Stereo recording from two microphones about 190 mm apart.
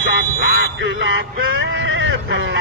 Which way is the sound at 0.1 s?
55° right (ahead or behind).